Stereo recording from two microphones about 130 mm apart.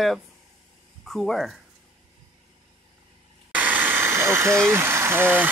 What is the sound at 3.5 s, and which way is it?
Vehicle, 15° right (ahead or behind).